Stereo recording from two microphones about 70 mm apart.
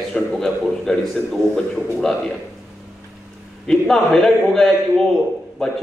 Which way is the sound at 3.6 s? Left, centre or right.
Centre.